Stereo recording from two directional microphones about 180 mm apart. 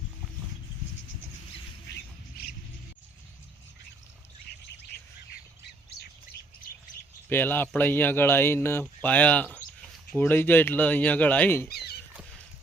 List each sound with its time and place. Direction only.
2.4 s a sound: 60° left (ahead or behind)
5.9 s squawk: 65° left (ahead or behind)
7.3 s speech: 10° left (ahead or behind)